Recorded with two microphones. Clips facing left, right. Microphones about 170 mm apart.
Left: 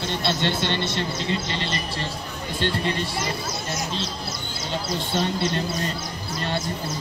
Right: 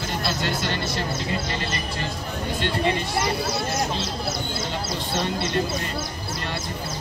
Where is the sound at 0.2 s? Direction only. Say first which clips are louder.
Left 2 dB; 25° left (ahead or behind).